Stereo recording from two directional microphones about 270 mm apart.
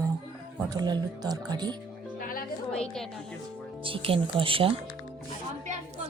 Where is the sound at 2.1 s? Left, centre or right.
Left.